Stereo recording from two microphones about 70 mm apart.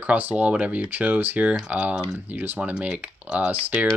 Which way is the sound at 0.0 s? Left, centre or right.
Right.